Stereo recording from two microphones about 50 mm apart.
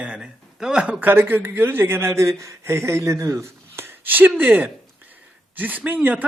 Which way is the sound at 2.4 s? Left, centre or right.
Right.